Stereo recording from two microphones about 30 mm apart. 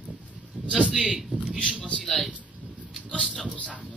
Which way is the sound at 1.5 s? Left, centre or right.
Left.